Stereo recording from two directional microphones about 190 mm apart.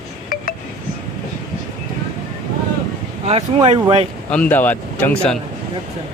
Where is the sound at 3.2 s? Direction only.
30° right (ahead or behind).